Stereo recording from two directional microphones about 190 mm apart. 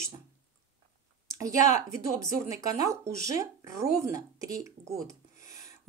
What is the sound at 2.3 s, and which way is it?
A woman's voice, 15° right (ahead or behind).